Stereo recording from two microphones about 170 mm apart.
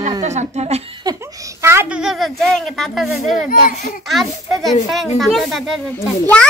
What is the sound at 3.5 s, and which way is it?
Speech, 45° left (ahead or behind).